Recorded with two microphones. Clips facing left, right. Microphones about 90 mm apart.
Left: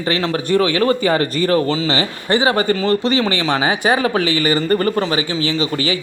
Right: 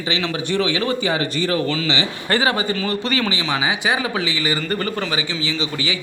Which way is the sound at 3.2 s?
45° left (ahead or behind).